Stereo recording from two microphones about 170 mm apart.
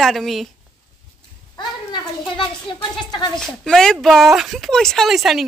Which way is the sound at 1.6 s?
30° left (ahead or behind).